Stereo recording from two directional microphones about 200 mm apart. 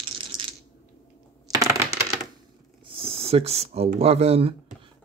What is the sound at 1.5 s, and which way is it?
Coin, 15° right (ahead or behind).